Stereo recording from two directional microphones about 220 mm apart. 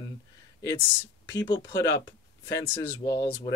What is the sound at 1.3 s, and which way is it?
Speech, 15° left (ahead or behind).